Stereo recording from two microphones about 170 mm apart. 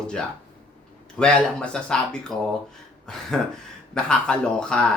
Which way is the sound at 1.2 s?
5° left (ahead or behind).